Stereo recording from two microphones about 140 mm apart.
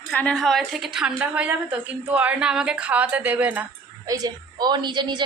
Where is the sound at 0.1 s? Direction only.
5° left (ahead or behind); by 3.7 s 10° right (ahead or behind).